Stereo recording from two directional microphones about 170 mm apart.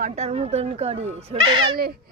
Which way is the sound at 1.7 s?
65° right (ahead or behind).